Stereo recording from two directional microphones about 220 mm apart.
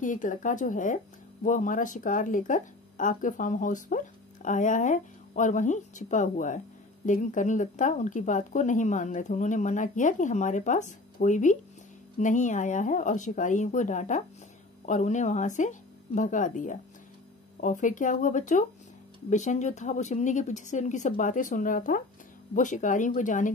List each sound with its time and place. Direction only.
0.0 s speech: 35° left (ahead or behind)